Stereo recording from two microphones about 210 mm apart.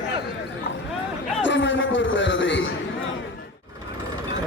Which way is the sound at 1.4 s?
60° left (ahead or behind).